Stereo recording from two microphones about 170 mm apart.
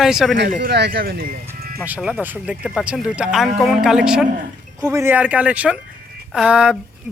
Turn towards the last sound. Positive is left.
turn(degrees=-5)  # may be behind; listen again after turning